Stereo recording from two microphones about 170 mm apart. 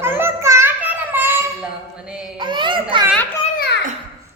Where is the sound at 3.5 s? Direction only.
70° left (ahead or behind).